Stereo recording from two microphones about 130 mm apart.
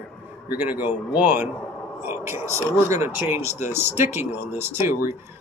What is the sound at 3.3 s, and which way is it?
Speech, 55° left (ahead or behind).